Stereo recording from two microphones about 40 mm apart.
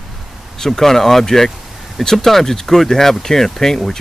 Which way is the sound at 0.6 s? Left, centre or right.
Centre.